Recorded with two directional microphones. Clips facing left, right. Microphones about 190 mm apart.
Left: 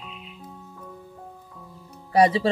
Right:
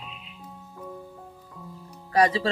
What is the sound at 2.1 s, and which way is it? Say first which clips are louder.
Speech: left 3 dB; 25° left (ahead or behind).